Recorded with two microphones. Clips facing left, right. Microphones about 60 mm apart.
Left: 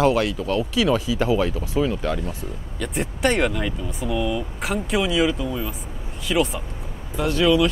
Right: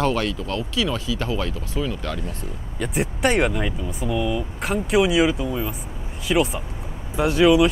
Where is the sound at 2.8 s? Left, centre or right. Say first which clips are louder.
Right 1 dB; centre.